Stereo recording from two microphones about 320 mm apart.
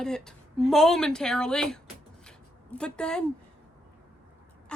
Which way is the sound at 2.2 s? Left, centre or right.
Centre.